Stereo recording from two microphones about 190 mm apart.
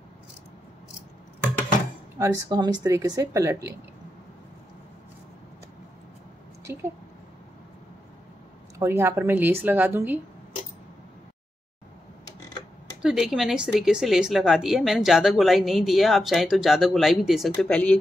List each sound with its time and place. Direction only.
2.1 s speech: 20° right (ahead or behind)
6.6 s a sound: 15° right (ahead or behind)
8.7 s speech: 15° right (ahead or behind)
13.0 s a woman's voice: 5° right (ahead or behind)